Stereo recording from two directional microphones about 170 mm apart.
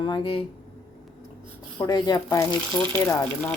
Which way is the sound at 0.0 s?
30° left (ahead or behind).